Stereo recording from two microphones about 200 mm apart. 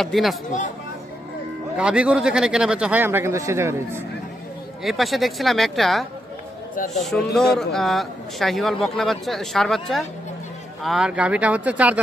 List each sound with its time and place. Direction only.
0.0 s a man's voice: centre (ahead or behind)
1.8 s speech: 5° right (ahead or behind)
4.8 s a man's voice: centre (ahead or behind)
6.7 s a man's voice: 45° left (ahead or behind)
7.0 s a man's voice: centre (ahead or behind)